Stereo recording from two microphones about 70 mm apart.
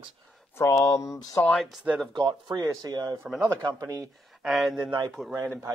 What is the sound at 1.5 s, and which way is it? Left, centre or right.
Speech, centre.